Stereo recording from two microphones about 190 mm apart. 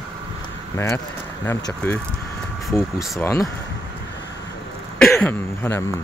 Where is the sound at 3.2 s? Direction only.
15° left (ahead or behind).